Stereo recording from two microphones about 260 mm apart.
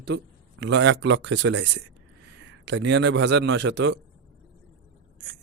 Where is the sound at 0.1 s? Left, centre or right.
Right.